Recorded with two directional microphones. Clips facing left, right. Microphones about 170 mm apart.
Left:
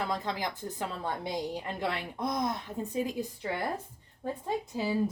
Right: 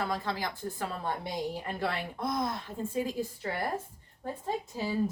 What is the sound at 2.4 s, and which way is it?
Speech, 20° left (ahead or behind).